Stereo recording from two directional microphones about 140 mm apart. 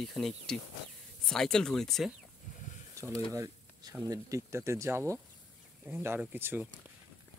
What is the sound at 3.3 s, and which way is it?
Speech, 25° right (ahead or behind).